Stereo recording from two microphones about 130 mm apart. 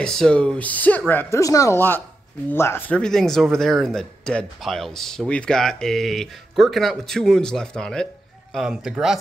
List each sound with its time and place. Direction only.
0.0 s speech: 5° left (ahead or behind)
1.4 s speech: 25° left (ahead or behind)
3.0 s speech: 5° left (ahead or behind)